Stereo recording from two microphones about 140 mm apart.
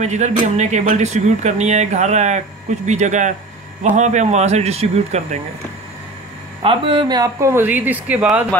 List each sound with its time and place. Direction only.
0.0 s speech: 55° right (ahead or behind)
6.6 s speech: 40° right (ahead or behind); by 8.5 s 10° right (ahead or behind)